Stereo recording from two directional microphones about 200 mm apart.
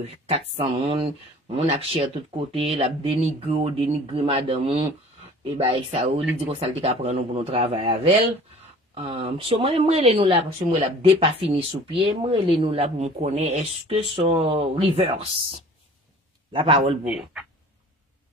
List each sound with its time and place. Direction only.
0.0 s speech: 30° right (ahead or behind)
16.5 s speech: 25° right (ahead or behind)
17.0 s speech: 5° right (ahead or behind)